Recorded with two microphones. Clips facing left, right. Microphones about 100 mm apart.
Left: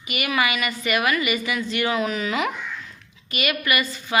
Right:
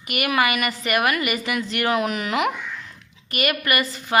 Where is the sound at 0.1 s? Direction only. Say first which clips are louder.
Right 2 dB; 55° right (ahead or behind).